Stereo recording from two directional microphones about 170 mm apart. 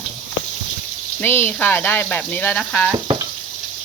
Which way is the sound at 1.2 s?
15° left (ahead or behind).